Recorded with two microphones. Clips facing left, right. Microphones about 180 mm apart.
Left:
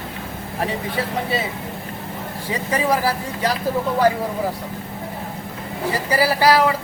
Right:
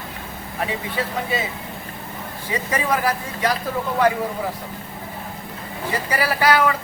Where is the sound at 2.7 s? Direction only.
30° left (ahead or behind).